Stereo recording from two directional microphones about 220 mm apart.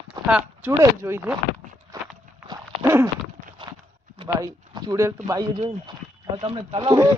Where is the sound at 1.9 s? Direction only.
15° right (ahead or behind).